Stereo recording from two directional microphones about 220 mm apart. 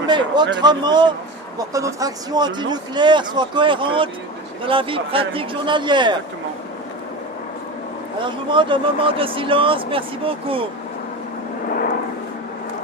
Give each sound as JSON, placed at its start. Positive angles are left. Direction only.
{"t": 0.1, "sound": "speech", "side_deg": -20}
{"t": 8.4, "sound": "speech", "side_deg": -20}